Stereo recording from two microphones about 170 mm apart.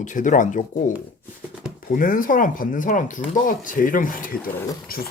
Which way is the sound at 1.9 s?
55° left (ahead or behind).